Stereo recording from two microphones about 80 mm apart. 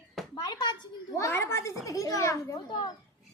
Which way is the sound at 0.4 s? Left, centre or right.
Left.